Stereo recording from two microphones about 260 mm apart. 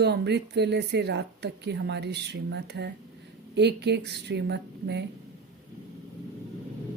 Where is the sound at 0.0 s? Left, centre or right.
Right.